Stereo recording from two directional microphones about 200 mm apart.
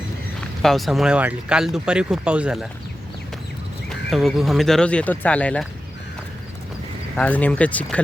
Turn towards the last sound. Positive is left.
turn(degrees=5)  # may be behind; listen again after turning